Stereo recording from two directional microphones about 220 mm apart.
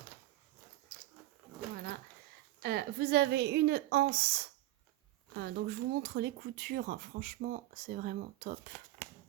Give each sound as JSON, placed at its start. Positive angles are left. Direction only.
{"t": 0.9, "sound": "dog", "side_deg": -40}
{"t": 2.6, "sound": "a woman's voice", "side_deg": -45}